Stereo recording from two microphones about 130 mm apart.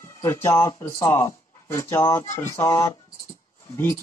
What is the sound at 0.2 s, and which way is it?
Speech, 20° left (ahead or behind).